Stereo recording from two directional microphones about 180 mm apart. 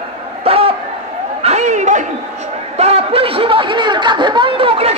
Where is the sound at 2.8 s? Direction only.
35° right (ahead or behind).